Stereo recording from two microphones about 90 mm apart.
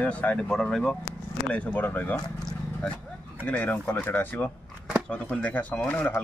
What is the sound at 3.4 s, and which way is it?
Speech, 15° left (ahead or behind).